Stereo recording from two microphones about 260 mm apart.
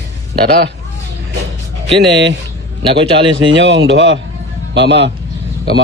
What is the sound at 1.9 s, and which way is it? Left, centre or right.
Speech, right.